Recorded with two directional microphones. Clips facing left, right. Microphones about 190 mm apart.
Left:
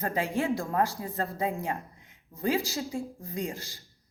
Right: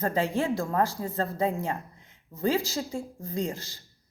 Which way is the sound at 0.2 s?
15° left (ahead or behind).